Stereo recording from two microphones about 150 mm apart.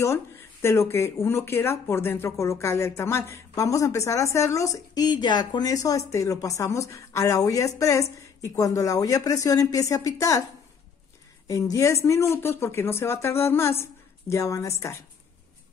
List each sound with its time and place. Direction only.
0.0 s speech: 20° left (ahead or behind)
11.4 s speech: 25° left (ahead or behind)